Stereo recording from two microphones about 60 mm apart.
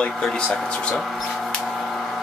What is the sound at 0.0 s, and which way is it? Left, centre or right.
Speech, centre.